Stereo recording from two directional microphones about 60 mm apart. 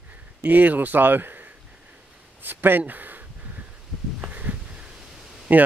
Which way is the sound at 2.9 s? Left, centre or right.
Right.